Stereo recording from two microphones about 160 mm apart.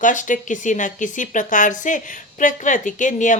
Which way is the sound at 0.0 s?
50° left (ahead or behind).